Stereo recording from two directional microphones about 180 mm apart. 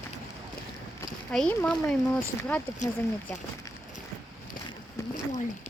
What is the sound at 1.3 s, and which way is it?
Speech, 5° left (ahead or behind).